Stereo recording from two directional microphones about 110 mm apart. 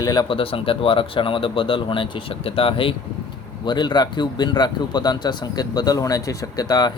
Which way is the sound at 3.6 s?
45° left (ahead or behind).